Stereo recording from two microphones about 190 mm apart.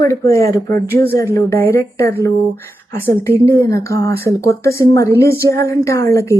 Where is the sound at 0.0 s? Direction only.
15° left (ahead or behind).